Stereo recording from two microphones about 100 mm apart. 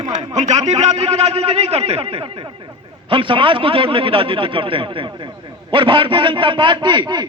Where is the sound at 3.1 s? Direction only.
60° right (ahead or behind).